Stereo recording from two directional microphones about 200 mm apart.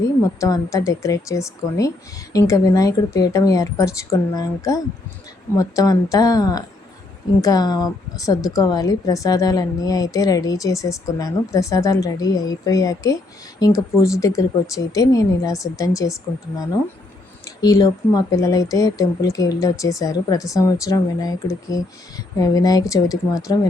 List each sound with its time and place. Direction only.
0.3 s speech: 15° left (ahead or behind)
17.6 s speech: 20° left (ahead or behind)